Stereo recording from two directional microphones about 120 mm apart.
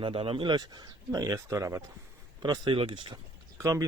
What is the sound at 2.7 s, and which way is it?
Speech, 45° right (ahead or behind).